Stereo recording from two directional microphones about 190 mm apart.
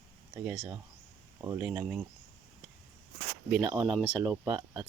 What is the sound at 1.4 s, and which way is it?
Speech, 15° right (ahead or behind).